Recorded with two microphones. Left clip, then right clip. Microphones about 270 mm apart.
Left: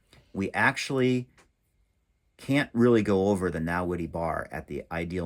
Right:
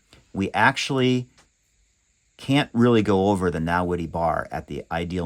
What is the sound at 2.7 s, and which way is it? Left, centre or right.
Speech, right.